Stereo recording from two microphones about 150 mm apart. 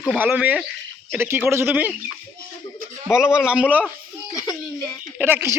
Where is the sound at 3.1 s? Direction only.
5° right (ahead or behind).